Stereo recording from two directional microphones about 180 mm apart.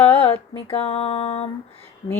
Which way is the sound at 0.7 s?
30° left (ahead or behind).